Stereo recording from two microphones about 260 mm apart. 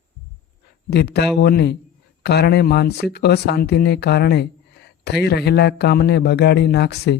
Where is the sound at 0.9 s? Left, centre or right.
Left.